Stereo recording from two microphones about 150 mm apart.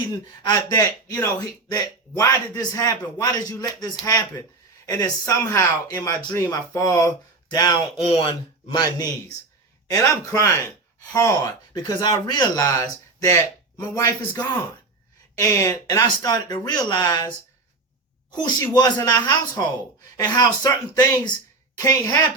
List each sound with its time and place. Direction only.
0.1 s speech: 25° left (ahead or behind)